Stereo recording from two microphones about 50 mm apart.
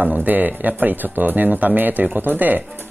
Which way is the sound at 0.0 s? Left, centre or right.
Right.